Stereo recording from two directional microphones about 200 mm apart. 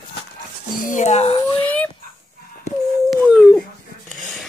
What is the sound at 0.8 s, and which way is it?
Speech, 40° left (ahead or behind).